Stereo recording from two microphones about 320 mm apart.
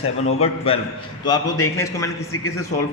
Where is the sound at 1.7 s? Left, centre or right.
Centre.